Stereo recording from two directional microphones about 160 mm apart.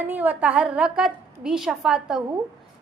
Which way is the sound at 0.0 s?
10° right (ahead or behind).